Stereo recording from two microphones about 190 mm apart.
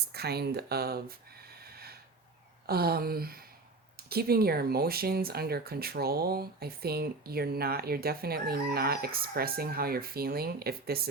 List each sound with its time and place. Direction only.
0.1 s speech: 55° right (ahead or behind)
1.6 s snort: 55° right (ahead or behind)
2.6 s speech: 55° right (ahead or behind)